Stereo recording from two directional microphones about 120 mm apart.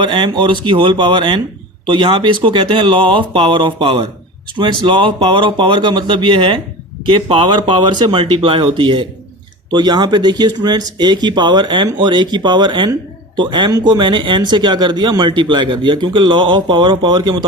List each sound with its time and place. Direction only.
0.0 s speech: 40° right (ahead or behind)